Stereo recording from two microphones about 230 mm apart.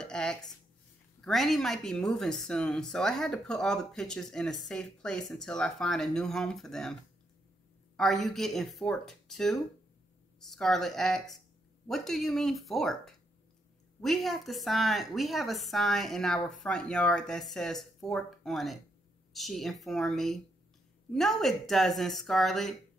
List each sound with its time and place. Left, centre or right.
0.0 s a sound: centre
1.2 s speech: centre
8.0 s speech: centre